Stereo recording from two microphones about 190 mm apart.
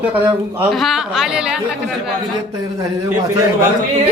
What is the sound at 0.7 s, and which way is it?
Speech, centre (ahead or behind).